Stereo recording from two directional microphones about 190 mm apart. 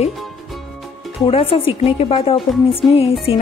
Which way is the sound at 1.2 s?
30° left (ahead or behind).